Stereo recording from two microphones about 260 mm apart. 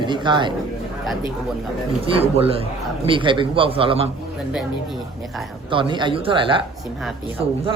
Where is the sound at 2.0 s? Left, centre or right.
Right.